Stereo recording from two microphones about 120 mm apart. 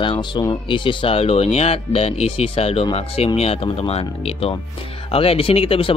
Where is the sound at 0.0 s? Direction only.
45° left (ahead or behind).